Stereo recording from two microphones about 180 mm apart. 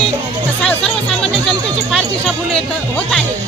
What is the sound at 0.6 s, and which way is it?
Music, 5° left (ahead or behind).